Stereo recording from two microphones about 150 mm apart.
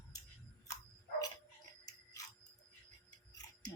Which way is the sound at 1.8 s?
20° left (ahead or behind).